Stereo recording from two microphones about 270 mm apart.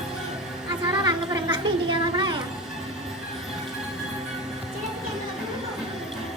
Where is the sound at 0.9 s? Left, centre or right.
Centre.